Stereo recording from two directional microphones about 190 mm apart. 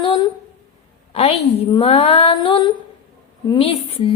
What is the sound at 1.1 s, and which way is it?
A woman's voice, 30° left (ahead or behind).